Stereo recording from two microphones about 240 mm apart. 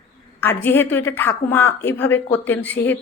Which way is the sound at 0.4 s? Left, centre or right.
Centre.